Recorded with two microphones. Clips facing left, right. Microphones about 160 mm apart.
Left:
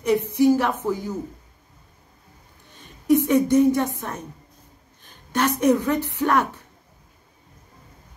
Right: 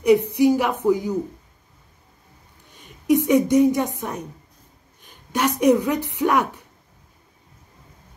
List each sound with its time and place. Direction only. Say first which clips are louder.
0.0 s a woman's voice: right 3 dB; 15° right (ahead or behind)
3.3 s a woman's voice: right 3 dB; 15° right (ahead or behind)